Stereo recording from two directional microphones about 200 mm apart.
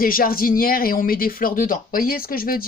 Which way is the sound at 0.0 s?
45° left (ahead or behind).